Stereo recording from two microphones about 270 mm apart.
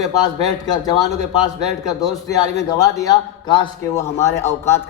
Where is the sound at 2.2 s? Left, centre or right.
Centre.